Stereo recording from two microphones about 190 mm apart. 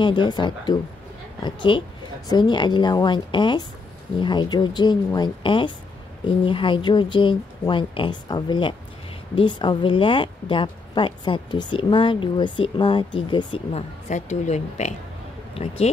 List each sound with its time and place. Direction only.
0.0 s a woman's voice: 25° left (ahead or behind)
14.0 s speech: 40° left (ahead or behind)